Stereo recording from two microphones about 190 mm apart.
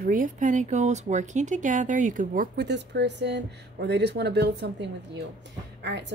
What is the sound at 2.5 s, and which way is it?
Speech, 60° right (ahead or behind).